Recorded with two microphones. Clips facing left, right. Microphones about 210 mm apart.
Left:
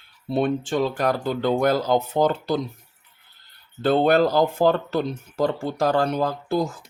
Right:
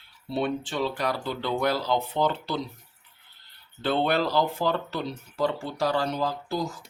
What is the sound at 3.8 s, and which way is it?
Speech, 45° left (ahead or behind).